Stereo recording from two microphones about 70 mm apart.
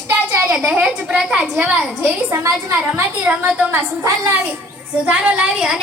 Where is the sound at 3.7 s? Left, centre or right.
Right.